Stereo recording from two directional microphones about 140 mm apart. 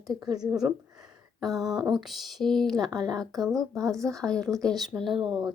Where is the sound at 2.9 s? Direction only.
30° right (ahead or behind).